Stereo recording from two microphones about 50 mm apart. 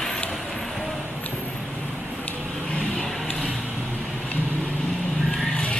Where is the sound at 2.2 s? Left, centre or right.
Left.